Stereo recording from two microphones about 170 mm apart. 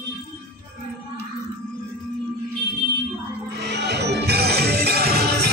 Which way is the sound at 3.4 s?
80° right.